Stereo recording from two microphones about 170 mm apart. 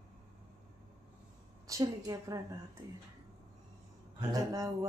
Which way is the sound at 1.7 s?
20° right (ahead or behind).